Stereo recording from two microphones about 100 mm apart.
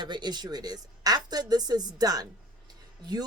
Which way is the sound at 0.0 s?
45° right (ahead or behind).